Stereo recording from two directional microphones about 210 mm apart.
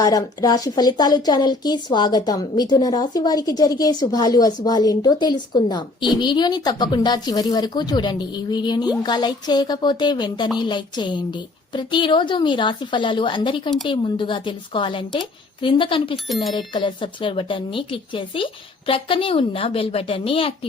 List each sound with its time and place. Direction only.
0.0 s a woman's voice: 20° left (ahead or behind)
16.1 s speech: centre (ahead or behind)
16.6 s a woman's voice: 25° left (ahead or behind)